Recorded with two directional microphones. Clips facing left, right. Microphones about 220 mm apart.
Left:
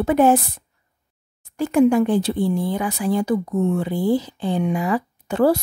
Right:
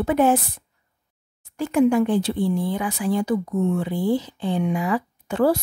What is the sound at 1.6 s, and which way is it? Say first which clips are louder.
Speech: left 2 dB; 40° left (ahead or behind).